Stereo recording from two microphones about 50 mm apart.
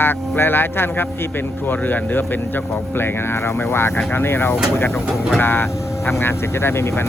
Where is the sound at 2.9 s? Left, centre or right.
Left.